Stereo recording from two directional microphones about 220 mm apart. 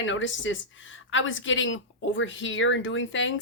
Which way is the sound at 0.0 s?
60° left (ahead or behind).